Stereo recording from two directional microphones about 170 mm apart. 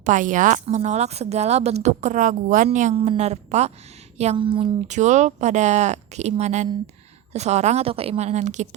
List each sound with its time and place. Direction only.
0.0 s a woman's voice: 50° right (ahead or behind); by 4.7 s 30° right (ahead or behind)
4.9 s a woman's voice: 45° right (ahead or behind)